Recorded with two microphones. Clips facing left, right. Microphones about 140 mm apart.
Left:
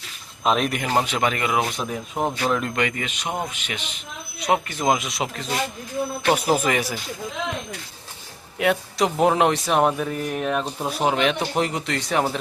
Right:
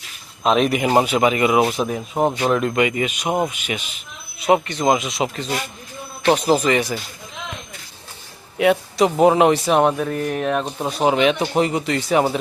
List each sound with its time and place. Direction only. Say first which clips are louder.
0.4 s a man's voice: right 4 dB; centre (ahead or behind)
0.8 s speech: right 6 dB; 15° right (ahead or behind)
1.8 s speech: right 6 dB; 20° right (ahead or behind)
2.5 s a man's voice: right 5 dB; 5° right (ahead or behind)
8.5 s a man's voice: right 5 dB; centre (ahead or behind)